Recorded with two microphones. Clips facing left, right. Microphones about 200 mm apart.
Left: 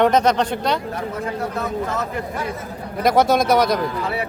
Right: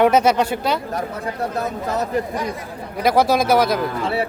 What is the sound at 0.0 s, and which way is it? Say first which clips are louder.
Speech: right 1 dB; 10° right (ahead or behind).